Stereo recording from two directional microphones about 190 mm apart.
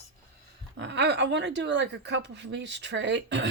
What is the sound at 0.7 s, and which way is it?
Speech, 70° right (ahead or behind).